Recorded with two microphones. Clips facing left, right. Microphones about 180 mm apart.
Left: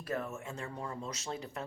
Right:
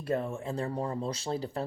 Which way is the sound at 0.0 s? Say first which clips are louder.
Right 6 dB; 30° right (ahead or behind).